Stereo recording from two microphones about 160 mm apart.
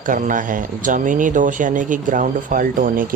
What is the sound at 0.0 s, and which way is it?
Speech, 55° right (ahead or behind).